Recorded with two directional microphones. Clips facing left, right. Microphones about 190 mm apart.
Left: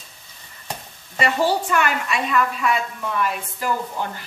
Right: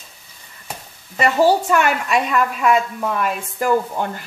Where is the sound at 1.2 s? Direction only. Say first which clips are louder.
Right 5 dB; 40° right (ahead or behind).